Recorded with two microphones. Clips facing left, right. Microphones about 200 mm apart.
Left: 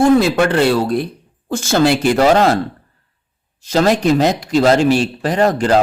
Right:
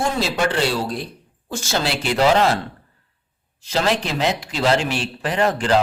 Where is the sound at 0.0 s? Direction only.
55° left (ahead or behind).